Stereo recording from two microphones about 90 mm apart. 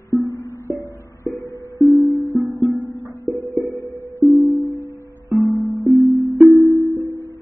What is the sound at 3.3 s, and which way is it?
Music, 35° right (ahead or behind).